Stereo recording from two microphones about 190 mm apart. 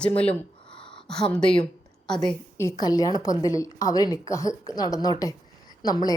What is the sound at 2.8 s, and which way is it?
A woman's voice, 20° left (ahead or behind).